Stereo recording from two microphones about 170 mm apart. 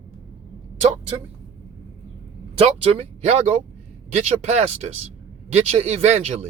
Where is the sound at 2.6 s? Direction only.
35° right (ahead or behind).